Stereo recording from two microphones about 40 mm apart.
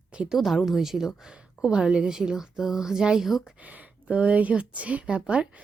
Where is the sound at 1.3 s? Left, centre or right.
Right.